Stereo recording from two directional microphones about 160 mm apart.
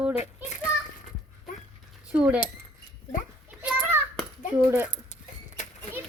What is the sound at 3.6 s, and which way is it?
Children playing, 10° right (ahead or behind).